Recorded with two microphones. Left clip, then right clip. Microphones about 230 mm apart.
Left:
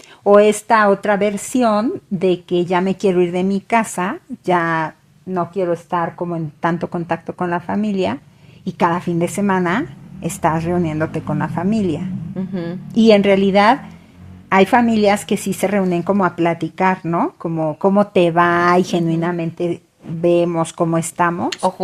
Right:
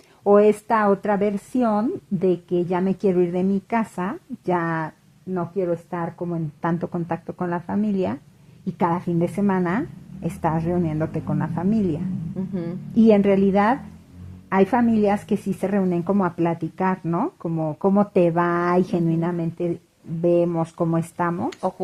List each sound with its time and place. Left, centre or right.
0.3 s a woman's voice: left
5.3 s a woman's voice: left